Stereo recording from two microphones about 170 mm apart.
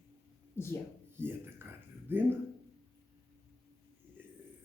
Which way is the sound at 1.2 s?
15° right (ahead or behind).